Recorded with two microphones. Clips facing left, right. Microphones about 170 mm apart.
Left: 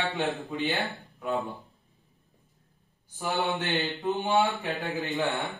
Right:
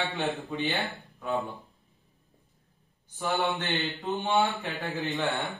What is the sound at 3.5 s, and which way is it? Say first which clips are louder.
Speech: left 2 dB; centre (ahead or behind).